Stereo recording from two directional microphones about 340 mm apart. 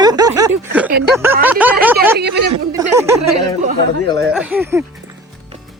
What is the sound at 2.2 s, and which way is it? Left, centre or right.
Speech, right.